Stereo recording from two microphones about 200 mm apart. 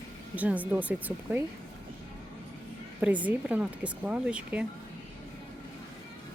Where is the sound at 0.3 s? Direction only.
10° right (ahead or behind).